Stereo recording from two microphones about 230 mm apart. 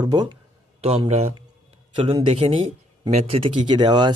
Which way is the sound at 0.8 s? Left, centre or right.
Right.